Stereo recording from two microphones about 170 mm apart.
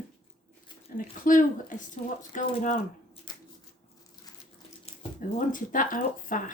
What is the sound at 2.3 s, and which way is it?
Speech, 50° left (ahead or behind).